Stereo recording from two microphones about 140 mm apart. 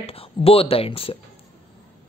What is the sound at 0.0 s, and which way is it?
Speech, 45° left (ahead or behind).